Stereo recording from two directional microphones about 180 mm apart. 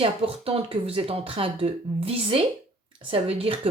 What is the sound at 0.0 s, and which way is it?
Speech, 30° right (ahead or behind).